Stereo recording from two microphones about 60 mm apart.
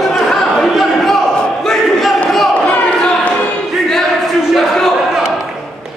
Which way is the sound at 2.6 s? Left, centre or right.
Left.